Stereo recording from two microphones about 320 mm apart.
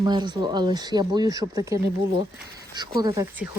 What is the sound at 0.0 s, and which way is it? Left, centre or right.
Speech, centre.